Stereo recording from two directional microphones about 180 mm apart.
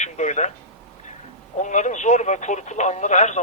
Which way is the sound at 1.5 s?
40° left (ahead or behind).